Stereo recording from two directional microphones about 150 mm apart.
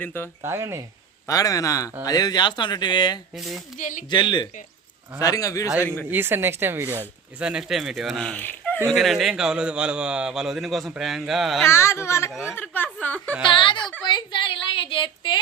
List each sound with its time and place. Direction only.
0.0 s speech: 15° left (ahead or behind)
0.4 s speech: 15° right (ahead or behind)
1.3 s speech: 25° left (ahead or behind)
3.3 s a man's voice: centre (ahead or behind)
3.8 s speech: 60° left (ahead or behind)
4.1 s speech: 30° left (ahead or behind)
6.1 s a man's voice: 15° right (ahead or behind); by 8.8 s 10° left (ahead or behind)
8.9 s a man's voice: centre (ahead or behind)
11.6 s speech: 15° left (ahead or behind)
12.3 s a man's voice: 5° right (ahead or behind)
12.5 s speech: 10° left (ahead or behind)
13.4 s a woman's voice: 35° left (ahead or behind)